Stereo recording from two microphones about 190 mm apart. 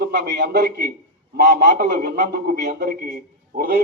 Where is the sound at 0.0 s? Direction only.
60° right (ahead or behind).